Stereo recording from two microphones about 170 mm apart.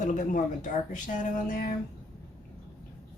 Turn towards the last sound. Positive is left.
turn(degrees=50)  # may be behind; listen again after turning